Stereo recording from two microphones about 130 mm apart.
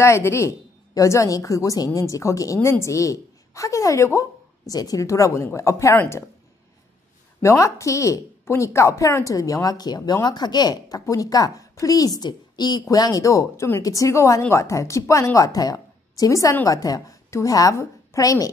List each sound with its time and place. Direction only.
0.0 s a woman's voice: 20° left (ahead or behind)
7.4 s a woman's voice: 25° left (ahead or behind)